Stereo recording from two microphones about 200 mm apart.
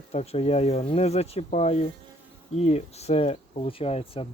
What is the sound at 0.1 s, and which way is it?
Speech, 30° left (ahead or behind).